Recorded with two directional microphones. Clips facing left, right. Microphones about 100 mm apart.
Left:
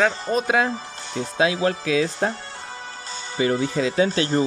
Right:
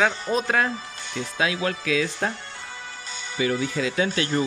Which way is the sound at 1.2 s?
30° left (ahead or behind).